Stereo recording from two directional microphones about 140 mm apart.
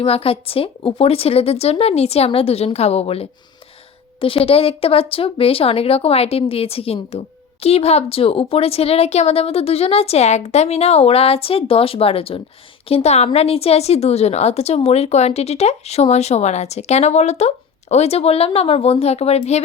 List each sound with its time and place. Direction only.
0.0 s a woman's voice: 45° left (ahead or behind)